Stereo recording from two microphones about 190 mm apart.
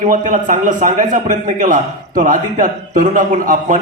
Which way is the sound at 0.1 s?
45° right (ahead or behind).